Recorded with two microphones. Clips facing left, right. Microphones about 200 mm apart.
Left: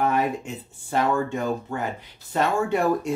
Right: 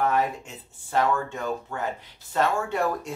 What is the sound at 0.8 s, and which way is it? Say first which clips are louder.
Speech: left 2 dB; 15° left (ahead or behind).